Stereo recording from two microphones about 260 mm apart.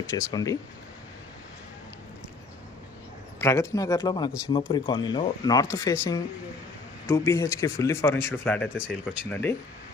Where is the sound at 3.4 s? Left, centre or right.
Centre.